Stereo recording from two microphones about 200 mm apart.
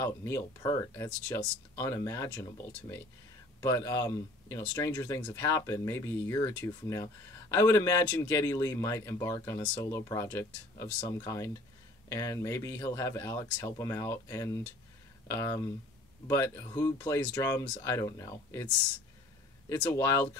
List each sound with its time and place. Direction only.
0.0 s speech: 15° left (ahead or behind)
19.7 s speech: 15° left (ahead or behind)